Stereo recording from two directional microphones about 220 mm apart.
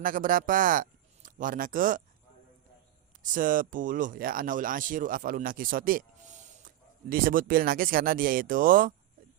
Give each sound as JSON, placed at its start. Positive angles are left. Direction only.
{"t": 0.0, "sound": "a man's voice", "side_deg": -40}
{"t": 3.2, "sound": "speech", "side_deg": -40}